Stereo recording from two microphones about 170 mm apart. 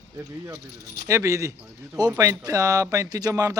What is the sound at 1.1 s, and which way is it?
Speech, 20° right (ahead or behind).